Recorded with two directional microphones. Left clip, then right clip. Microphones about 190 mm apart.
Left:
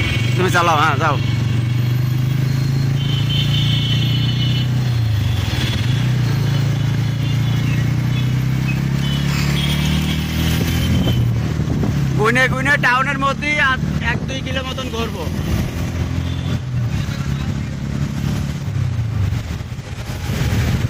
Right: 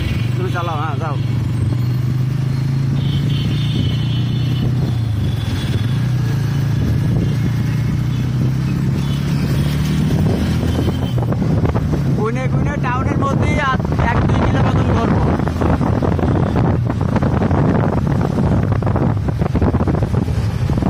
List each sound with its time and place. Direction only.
0.5 s speech: 15° left (ahead or behind)
12.2 s vehicle: centre (ahead or behind)
13.2 s vehicle: 20° right (ahead or behind)